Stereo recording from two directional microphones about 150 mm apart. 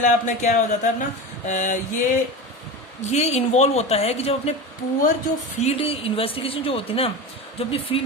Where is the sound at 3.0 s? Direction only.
45° left (ahead or behind).